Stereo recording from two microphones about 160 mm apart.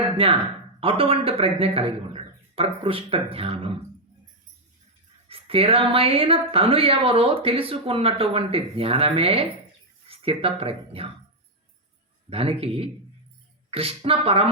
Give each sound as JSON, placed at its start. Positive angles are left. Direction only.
{"t": 0.8, "sound": "speech", "side_deg": -35}
{"t": 5.3, "sound": "speech", "side_deg": -35}
{"t": 12.3, "sound": "speech", "side_deg": -35}